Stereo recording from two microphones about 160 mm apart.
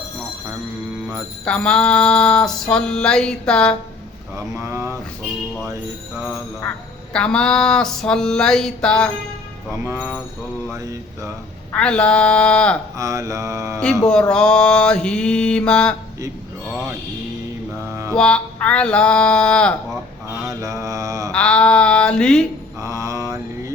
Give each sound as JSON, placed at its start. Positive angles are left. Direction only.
{"t": 1.5, "sound": "music", "side_deg": 5}
{"t": 4.4, "sound": "speech", "side_deg": -15}
{"t": 7.1, "sound": "music", "side_deg": 5}
{"t": 9.8, "sound": "speech", "side_deg": -15}
{"t": 10.7, "sound": "mantra", "side_deg": -20}
{"t": 11.7, "sound": "speech", "side_deg": 5}
{"t": 13.0, "sound": "mantra", "side_deg": -20}
{"t": 14.0, "sound": "music", "side_deg": 5}
{"t": 18.1, "sound": "music", "side_deg": 5}
{"t": 20.3, "sound": "mantra", "side_deg": -20}
{"t": 21.3, "sound": "speech", "side_deg": 5}
{"t": 22.8, "sound": "mantra", "side_deg": -20}